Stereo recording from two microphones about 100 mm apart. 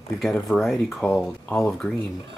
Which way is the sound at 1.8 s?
15° left (ahead or behind).